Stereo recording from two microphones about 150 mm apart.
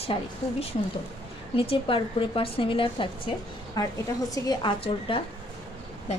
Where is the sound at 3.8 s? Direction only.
25° left (ahead or behind).